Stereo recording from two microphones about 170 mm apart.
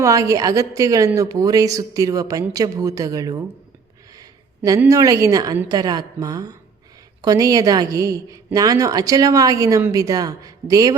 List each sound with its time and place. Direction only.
0.0 s a woman's voice: 20° right (ahead or behind)
4.2 s a sound: 20° right (ahead or behind)
4.9 s a woman's voice: 20° right (ahead or behind)